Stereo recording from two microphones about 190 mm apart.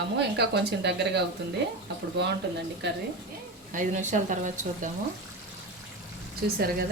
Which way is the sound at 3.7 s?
40° right (ahead or behind).